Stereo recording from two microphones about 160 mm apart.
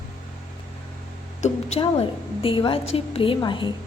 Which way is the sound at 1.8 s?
35° left (ahead or behind).